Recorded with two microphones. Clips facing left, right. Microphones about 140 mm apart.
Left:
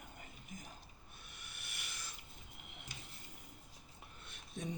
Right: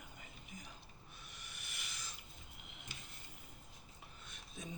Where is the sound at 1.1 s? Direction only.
55° left (ahead or behind).